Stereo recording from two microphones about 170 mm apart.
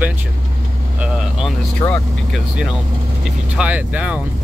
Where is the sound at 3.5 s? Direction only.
10° right (ahead or behind).